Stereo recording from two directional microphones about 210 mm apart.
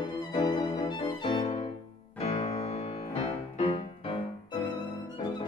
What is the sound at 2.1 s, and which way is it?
Music, 30° left (ahead or behind).